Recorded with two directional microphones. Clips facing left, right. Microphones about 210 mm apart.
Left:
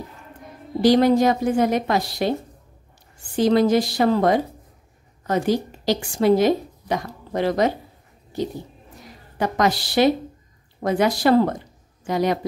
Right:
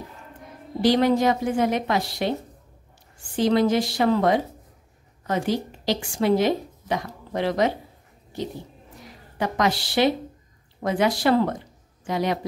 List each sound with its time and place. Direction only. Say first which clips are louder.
0.8 s a woman's voice: left 3 dB; 40° left (ahead or behind)
3.3 s a woman's voice: left 3 dB; 40° left (ahead or behind)
9.4 s a woman's voice: left 3 dB; 40° left (ahead or behind)